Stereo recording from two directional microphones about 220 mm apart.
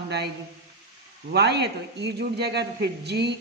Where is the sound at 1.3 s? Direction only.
50° right (ahead or behind).